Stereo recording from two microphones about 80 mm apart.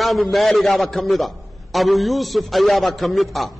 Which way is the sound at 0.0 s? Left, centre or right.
Centre.